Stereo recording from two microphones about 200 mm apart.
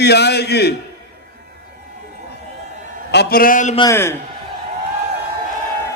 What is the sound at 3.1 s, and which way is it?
Speech, 50° left (ahead or behind).